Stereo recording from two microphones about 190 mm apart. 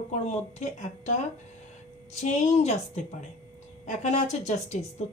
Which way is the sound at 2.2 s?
35° left (ahead or behind).